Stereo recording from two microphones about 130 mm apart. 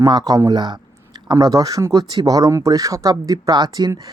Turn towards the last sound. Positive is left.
turn(degrees=-30)  # may be behind; listen again after turning